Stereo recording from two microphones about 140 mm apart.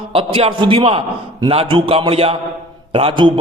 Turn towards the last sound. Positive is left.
turn(degrees=-40)  # may be behind; listen again after turning